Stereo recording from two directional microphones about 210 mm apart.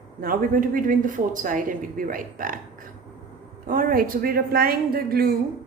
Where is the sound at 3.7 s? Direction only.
40° right (ahead or behind).